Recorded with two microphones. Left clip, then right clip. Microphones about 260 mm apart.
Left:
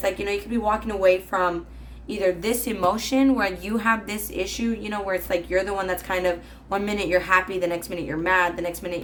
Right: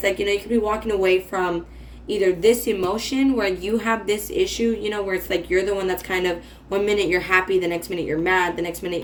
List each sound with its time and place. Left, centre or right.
0.3 s speech: left